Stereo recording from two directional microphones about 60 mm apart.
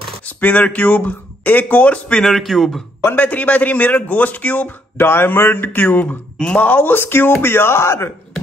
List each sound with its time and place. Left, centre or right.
0.4 s a man's voice: left
2.2 s speech: centre
3.1 s a man's voice: left
4.9 s a man's voice: left
6.3 s speech: centre
6.6 s a man's voice: left